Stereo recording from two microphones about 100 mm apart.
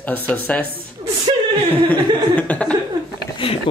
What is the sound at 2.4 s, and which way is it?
Speech, 15° left (ahead or behind).